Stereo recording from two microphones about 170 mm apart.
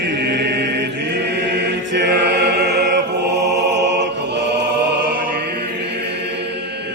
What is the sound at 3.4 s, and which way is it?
Music, 90° right.